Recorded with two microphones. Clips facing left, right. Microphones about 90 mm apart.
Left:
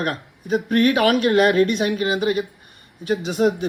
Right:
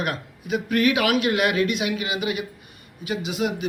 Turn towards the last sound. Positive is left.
turn(degrees=45)  # may be behind; listen again after turning